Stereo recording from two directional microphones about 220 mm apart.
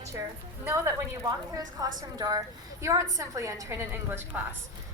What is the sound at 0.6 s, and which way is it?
A woman's voice, 15° right (ahead or behind).